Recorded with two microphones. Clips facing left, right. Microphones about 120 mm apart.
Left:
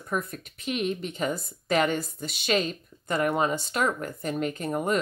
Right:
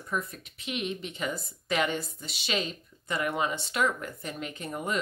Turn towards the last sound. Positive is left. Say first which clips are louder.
# left 6 dB
turn(degrees=45)  # may be behind; listen again after turning